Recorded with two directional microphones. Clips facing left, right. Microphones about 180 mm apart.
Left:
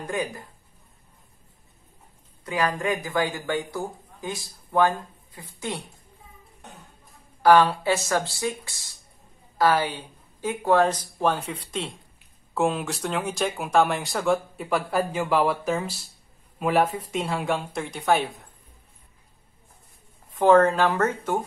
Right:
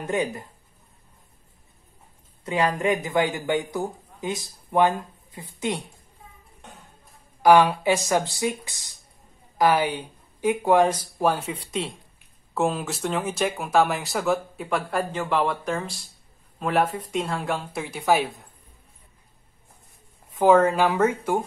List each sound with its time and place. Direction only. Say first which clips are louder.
0.0 s speech: right 3 dB; 20° right (ahead or behind)
2.4 s speech: right 3 dB; 25° right (ahead or behind)
7.4 s speech: right 1 dB; 15° right (ahead or behind)
20.3 s speech: even; 10° right (ahead or behind)